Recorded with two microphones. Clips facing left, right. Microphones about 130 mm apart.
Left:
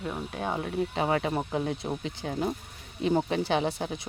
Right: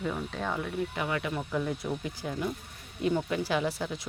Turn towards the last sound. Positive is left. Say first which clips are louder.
# left 2 dB
turn(degrees=25)  # may be behind; listen again after turning